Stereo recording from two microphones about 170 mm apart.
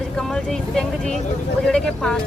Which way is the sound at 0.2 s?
5° left (ahead or behind).